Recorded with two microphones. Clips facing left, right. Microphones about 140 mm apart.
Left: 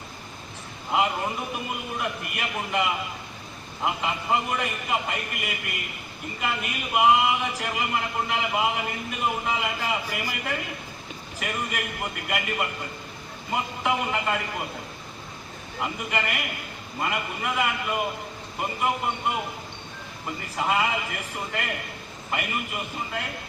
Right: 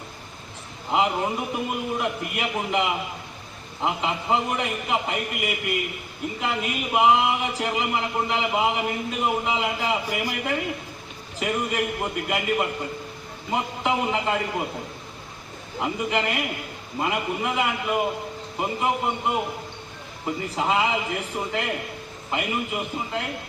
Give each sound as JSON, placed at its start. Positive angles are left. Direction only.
{"t": 0.9, "sound": "a man's voice", "side_deg": -20}
{"t": 6.4, "sound": "a man's voice", "side_deg": -25}
{"t": 15.8, "sound": "a man's voice", "side_deg": -20}